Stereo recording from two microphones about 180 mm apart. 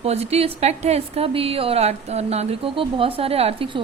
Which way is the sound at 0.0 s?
35° right (ahead or behind).